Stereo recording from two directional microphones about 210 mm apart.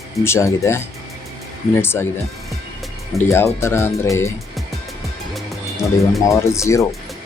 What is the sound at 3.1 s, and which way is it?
Speech, 10° left (ahead or behind).